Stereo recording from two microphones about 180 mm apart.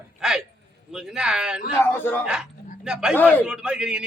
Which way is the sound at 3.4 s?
5° right (ahead or behind).